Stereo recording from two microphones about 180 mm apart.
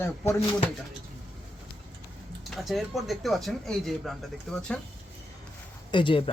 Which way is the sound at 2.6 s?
Centre (ahead or behind).